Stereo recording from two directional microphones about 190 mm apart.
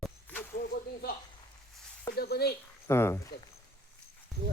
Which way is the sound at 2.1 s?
55° left (ahead or behind).